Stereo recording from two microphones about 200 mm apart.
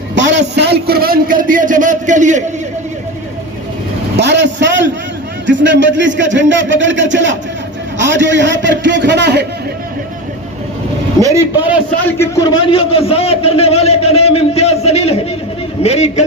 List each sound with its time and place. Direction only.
0.2 s a sound: 65° right (ahead or behind); by 2.4 s 40° right (ahead or behind)
4.2 s vehicle: 60° right (ahead or behind)
5.5 s speech: 65° right (ahead or behind)
11.2 s a man's voice: 15° right (ahead or behind)
12.0 s a man's voice: 10° left (ahead or behind)
12.6 s a man's voice: 30° left (ahead or behind)